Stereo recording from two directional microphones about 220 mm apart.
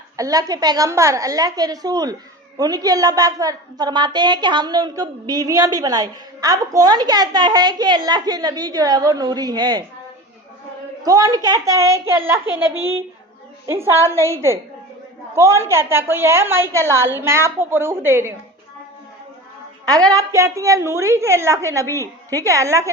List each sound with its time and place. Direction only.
0.2 s a woman's voice: 15° right (ahead or behind)
11.0 s a woman's voice: 15° right (ahead or behind)
19.9 s a woman's voice: 15° right (ahead or behind)
21.9 s a woman's voice: 10° left (ahead or behind)
22.4 s a woman's voice: 15° right (ahead or behind)